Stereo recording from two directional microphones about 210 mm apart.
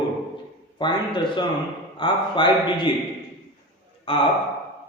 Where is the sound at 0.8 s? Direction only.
20° left (ahead or behind).